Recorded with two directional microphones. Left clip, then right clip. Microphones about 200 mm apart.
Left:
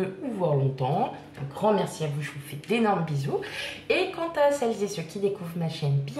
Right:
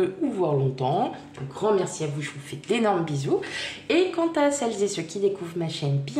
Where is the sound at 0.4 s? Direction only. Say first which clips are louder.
Even; 35° right (ahead or behind).